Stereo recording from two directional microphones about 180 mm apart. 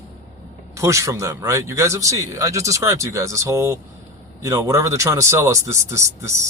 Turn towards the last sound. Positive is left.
turn(degrees=-15)  # may be behind; listen again after turning